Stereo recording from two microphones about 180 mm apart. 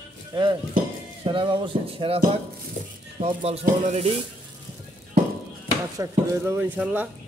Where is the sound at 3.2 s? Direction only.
35° right (ahead or behind).